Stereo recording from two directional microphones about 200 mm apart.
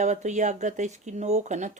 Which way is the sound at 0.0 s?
35° right (ahead or behind).